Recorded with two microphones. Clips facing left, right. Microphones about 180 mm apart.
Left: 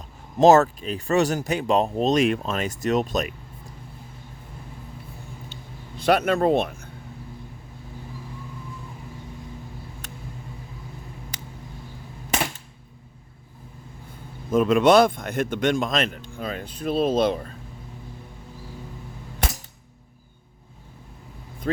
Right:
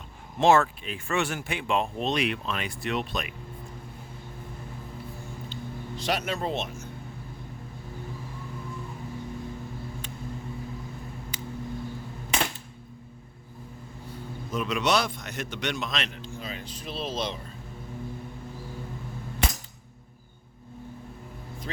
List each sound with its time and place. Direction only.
0.3 s speech: 40° left (ahead or behind)
6.0 s speech: 55° left (ahead or behind)
14.5 s a man's voice: 50° left (ahead or behind)